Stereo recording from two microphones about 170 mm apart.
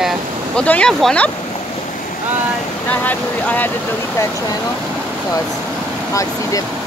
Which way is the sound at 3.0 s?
10° left (ahead or behind).